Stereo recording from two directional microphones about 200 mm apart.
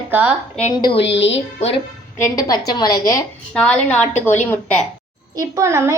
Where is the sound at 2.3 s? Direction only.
20° left (ahead or behind).